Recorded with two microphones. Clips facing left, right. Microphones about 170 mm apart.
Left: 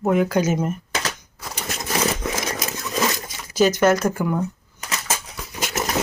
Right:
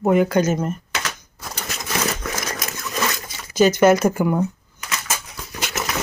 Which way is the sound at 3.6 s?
Centre (ahead or behind).